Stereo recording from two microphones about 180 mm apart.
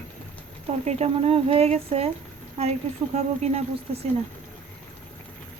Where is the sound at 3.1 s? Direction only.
35° right (ahead or behind).